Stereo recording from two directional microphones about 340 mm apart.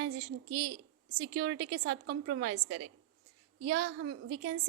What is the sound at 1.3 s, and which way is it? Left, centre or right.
Speech, right.